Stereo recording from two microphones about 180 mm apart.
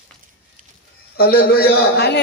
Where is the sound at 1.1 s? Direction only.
55° left (ahead or behind).